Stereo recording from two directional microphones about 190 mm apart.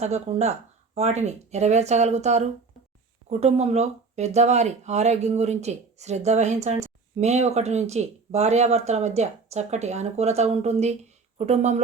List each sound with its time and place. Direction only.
0.0 s speech: 35° right (ahead or behind)